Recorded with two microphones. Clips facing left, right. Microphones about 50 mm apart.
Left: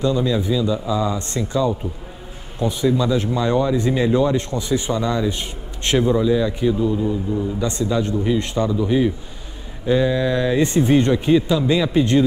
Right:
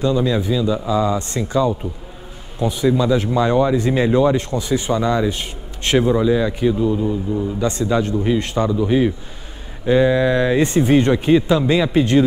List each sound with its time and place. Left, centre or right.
0.0 s speech: right
3.7 s speech: right
4.4 s speech: right
7.0 s a man's voice: centre
7.8 s speech: right